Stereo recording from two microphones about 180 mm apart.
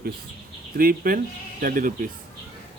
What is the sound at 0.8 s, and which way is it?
Speech, 50° right (ahead or behind).